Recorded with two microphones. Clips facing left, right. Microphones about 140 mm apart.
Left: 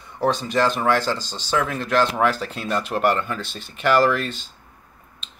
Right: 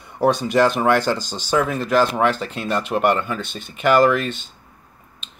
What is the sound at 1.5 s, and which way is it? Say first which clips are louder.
Speech: right 3 dB; 5° right (ahead or behind).